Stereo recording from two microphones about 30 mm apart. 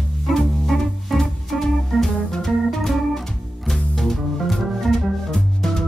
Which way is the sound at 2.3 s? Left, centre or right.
Centre.